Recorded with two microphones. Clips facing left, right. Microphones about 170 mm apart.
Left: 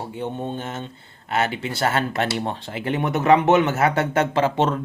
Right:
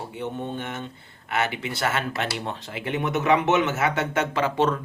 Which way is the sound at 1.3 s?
30° left (ahead or behind).